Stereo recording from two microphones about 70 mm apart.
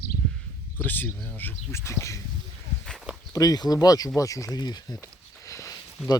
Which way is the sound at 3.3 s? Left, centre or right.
Left.